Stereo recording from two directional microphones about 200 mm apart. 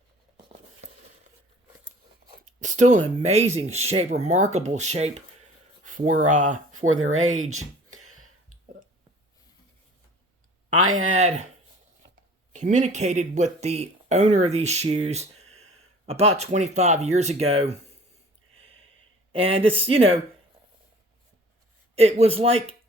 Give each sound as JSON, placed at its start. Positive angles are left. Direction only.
{"t": 2.4, "sound": "speech", "side_deg": -40}
{"t": 6.7, "sound": "speech", "side_deg": -90}
{"t": 7.5, "sound": "a sound", "side_deg": -90}
{"t": 11.1, "sound": "speech", "side_deg": -35}
{"t": 12.5, "sound": "speech", "side_deg": -35}
{"t": 19.3, "sound": "speech", "side_deg": -30}
{"t": 21.9, "sound": "speech", "side_deg": -30}